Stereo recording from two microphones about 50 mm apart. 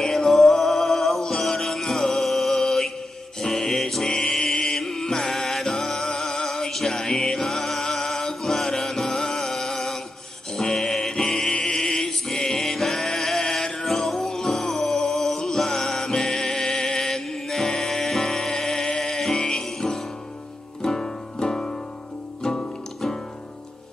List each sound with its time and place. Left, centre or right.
0.0 s music: centre